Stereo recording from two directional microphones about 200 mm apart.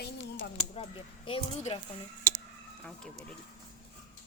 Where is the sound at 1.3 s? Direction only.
30° left (ahead or behind).